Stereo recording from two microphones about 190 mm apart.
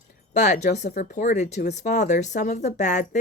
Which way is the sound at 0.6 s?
60° left (ahead or behind).